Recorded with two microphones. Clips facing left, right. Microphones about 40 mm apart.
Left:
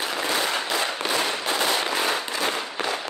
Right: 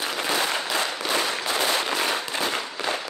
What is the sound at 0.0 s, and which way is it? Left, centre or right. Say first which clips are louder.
Firecracker: even; left.